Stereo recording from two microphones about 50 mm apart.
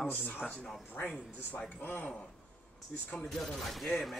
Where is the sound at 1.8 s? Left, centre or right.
Left.